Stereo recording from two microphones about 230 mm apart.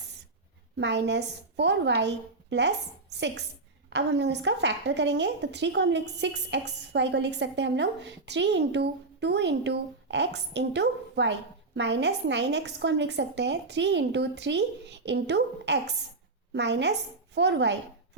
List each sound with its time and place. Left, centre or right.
0.8 s a woman's voice: right